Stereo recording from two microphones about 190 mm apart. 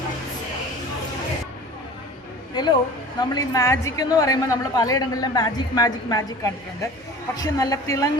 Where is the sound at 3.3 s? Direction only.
15° left (ahead or behind).